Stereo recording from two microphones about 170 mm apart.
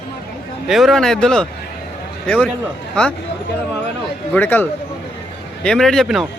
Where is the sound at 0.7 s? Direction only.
Centre (ahead or behind).